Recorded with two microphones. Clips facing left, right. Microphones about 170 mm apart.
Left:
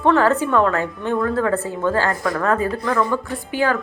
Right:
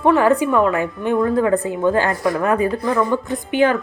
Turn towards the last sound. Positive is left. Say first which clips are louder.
# right 4 dB
turn(degrees=-20)  # may be behind; listen again after turning